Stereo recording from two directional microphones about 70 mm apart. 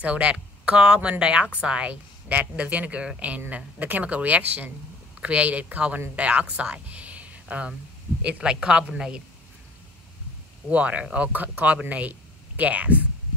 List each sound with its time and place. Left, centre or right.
0.0 s speech: centre
10.7 s speech: centre